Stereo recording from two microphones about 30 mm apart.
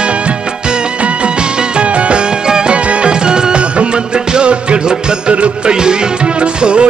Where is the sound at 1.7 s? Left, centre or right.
Right.